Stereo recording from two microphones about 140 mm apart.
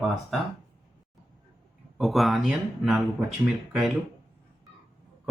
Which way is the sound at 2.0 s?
Centre (ahead or behind).